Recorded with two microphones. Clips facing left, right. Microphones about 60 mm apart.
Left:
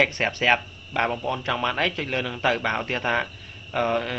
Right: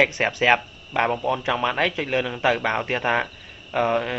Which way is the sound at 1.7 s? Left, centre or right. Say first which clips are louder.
Right 3 dB; centre.